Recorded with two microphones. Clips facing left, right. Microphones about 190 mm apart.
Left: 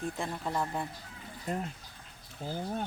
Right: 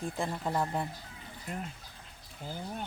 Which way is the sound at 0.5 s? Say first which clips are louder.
Right 1 dB; 20° right (ahead or behind).